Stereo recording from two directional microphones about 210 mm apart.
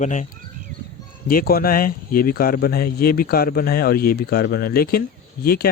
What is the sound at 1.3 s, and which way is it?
Speech, 45° left (ahead or behind).